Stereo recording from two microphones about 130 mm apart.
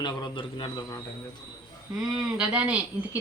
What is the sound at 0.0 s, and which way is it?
Speech, 35° left (ahead or behind).